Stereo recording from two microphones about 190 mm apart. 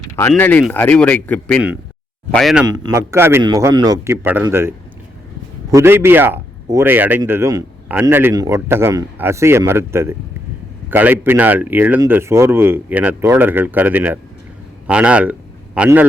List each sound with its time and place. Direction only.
0.2 s speech: 10° left (ahead or behind)
2.6 s speech: 20° right (ahead or behind)
5.7 s a man's voice: 15° right (ahead or behind)